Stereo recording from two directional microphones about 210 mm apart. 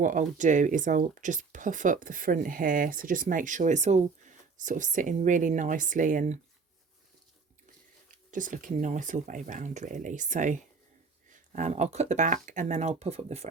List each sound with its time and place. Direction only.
0.0 s speech: 40° right (ahead or behind)
8.0 s speech: 40° right (ahead or behind)